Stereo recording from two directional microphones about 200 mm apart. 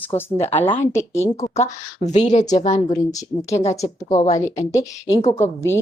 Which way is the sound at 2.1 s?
35° left (ahead or behind).